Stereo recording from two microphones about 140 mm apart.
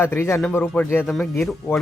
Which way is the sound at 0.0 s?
15° left (ahead or behind).